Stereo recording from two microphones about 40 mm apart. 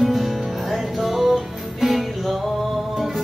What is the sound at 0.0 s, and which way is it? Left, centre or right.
Music, centre.